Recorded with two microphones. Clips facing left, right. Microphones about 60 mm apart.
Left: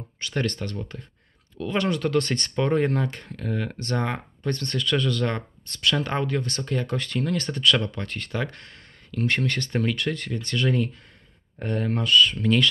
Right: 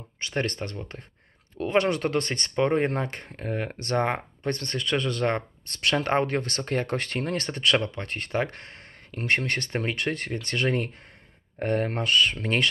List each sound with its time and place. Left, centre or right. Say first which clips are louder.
0.2 s speech: left 1 dB; right